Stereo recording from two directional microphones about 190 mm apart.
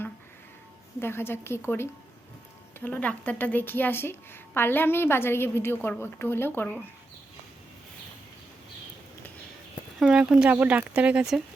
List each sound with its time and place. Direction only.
0.9 s a woman's voice: 10° left (ahead or behind)
10.0 s speech: 5° right (ahead or behind)